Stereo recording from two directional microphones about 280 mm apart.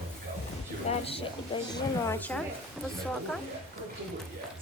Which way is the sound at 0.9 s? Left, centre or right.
Left.